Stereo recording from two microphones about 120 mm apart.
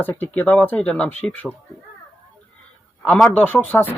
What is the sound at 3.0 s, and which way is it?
Speech, 10° left (ahead or behind).